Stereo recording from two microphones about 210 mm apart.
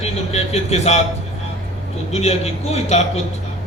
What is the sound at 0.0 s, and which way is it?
Speech, 30° left (ahead or behind).